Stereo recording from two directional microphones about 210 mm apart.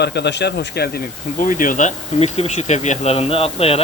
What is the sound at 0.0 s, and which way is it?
Speech, 50° left (ahead or behind).